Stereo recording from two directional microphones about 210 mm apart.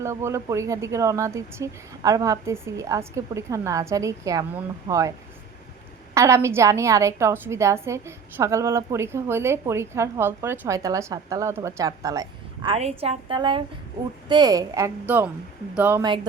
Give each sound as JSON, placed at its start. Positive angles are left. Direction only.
{"t": 0.0, "sound": "a woman's voice", "side_deg": -15}
{"t": 6.1, "sound": "a woman's voice", "side_deg": -15}
{"t": 12.7, "sound": "a woman's voice", "side_deg": -30}